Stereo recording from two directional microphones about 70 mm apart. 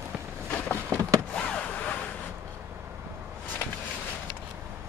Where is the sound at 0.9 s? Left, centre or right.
Right.